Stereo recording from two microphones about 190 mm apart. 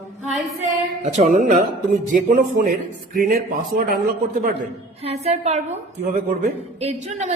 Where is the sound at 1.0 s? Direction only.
40° right (ahead or behind).